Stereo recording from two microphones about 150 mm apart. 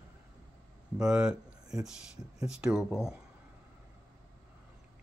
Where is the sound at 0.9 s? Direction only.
5° right (ahead or behind).